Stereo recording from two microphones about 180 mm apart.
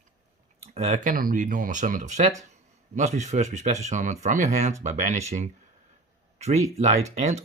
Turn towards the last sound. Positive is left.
turn(degrees=-40)  # may be behind; listen again after turning